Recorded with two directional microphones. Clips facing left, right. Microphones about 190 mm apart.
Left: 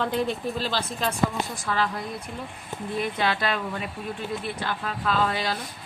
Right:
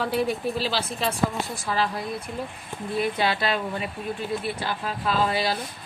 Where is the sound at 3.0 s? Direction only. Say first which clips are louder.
Right 2 dB; 5° right (ahead or behind).